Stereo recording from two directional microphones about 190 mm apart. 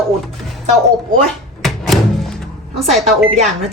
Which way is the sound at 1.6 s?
Centre (ahead or behind).